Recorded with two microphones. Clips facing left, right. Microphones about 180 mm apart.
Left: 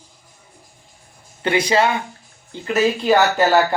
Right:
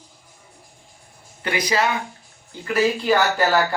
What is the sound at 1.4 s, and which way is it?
Speech, 25° left (ahead or behind).